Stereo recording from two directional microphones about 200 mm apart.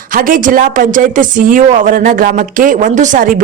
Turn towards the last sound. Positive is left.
turn(degrees=-40)  # may be behind; listen again after turning